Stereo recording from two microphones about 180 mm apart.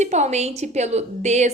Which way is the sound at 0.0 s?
40° right (ahead or behind).